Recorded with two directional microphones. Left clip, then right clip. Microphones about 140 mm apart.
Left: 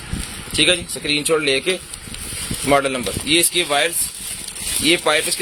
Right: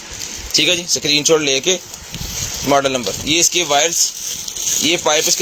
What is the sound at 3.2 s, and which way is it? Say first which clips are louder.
A man's voice: right 2 dB; 20° right (ahead or behind).